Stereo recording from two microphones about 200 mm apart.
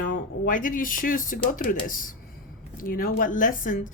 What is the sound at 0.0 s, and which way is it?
Speech, 40° left (ahead or behind).